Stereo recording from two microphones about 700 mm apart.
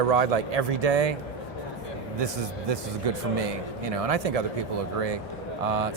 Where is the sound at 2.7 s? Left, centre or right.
Right.